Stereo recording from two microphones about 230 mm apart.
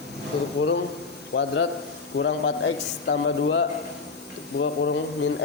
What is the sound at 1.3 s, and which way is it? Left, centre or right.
Speech, left.